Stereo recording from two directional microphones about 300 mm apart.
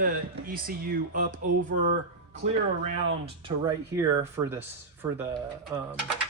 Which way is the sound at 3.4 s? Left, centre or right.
Centre.